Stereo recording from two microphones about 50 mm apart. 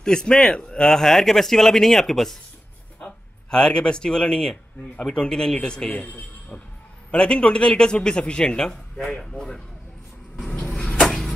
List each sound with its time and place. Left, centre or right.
0.0 s a man's voice: centre
3.4 s a man's voice: centre
7.1 s a man's voice: centre
10.8 s a sound: centre